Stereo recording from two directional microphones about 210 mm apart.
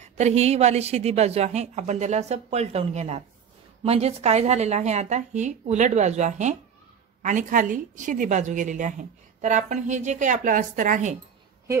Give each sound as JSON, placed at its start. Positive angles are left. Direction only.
{"t": 0.0, "sound": "a woman's voice", "side_deg": -30}